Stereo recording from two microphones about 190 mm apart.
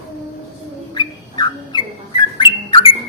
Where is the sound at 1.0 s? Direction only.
25° left (ahead or behind).